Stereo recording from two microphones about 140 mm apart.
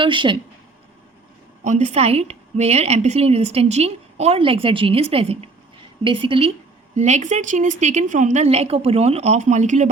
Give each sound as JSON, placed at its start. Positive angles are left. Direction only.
{"t": 0.0, "sound": "a woman's voice", "side_deg": -35}
{"t": 1.6, "sound": "a woman's voice", "side_deg": -55}
{"t": 6.9, "sound": "a woman's voice", "side_deg": -55}